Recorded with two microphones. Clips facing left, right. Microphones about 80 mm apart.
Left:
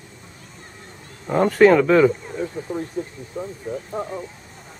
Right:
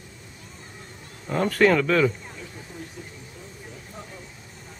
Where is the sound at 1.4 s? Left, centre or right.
Centre.